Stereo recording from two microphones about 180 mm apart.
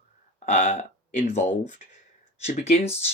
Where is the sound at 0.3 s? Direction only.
40° left (ahead or behind).